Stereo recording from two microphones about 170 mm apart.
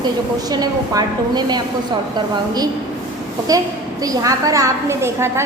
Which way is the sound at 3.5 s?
20° right (ahead or behind).